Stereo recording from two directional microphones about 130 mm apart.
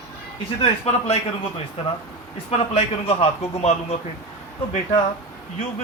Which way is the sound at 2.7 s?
50° left (ahead or behind).